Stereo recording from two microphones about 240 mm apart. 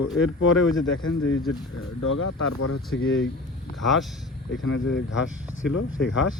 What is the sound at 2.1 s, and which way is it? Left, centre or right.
Speech, left.